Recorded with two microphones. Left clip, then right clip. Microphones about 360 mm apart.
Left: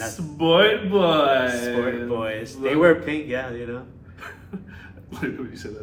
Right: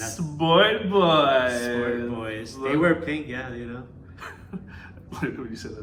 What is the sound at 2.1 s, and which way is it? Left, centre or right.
Speech, centre.